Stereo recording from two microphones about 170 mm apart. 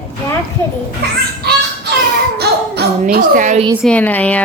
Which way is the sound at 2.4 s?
70° right (ahead or behind).